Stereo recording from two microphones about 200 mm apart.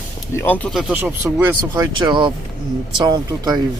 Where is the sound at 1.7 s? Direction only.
20° right (ahead or behind).